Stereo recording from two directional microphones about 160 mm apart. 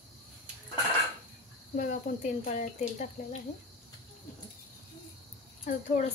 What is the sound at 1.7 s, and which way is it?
Speech, 55° left (ahead or behind).